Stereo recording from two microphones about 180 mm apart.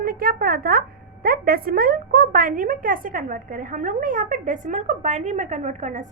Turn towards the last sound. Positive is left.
turn(degrees=-45)  # may be behind; listen again after turning